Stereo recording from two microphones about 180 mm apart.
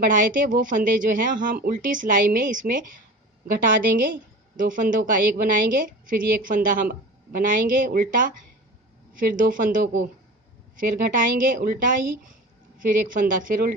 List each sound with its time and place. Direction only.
0.0 s a woman's voice: 50° right (ahead or behind)